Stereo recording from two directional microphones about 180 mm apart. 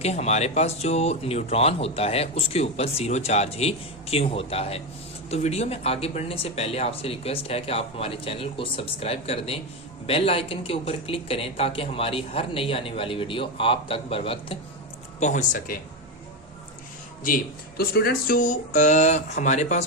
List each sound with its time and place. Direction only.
0.0 s speech: 35° left (ahead or behind)
15.2 s speech: 45° left (ahead or behind)
17.2 s speech: 55° left (ahead or behind)